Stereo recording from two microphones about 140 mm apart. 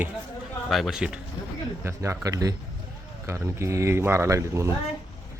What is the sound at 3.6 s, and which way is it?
Speech, 20° right (ahead or behind).